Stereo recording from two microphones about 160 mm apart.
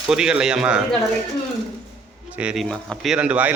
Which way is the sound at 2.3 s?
5° right (ahead or behind).